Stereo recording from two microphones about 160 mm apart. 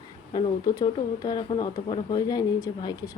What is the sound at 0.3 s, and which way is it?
Speech, 25° left (ahead or behind).